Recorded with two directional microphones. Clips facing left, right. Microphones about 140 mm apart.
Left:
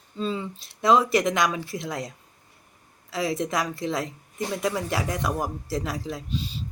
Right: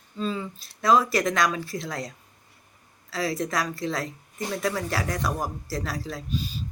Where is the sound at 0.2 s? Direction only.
25° left (ahead or behind).